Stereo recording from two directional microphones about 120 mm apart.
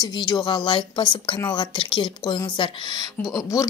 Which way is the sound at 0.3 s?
35° left (ahead or behind).